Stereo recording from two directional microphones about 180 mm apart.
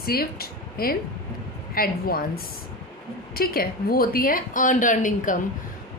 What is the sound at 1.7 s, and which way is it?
A woman's voice, 55° left (ahead or behind).